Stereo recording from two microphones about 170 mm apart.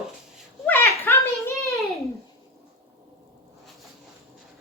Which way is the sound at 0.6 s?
10° left (ahead or behind).